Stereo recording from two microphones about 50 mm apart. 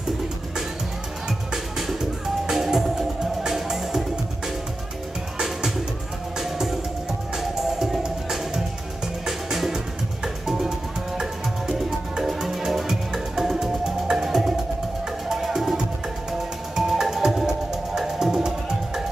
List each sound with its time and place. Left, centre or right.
1.5 s music: centre
6.4 s music: centre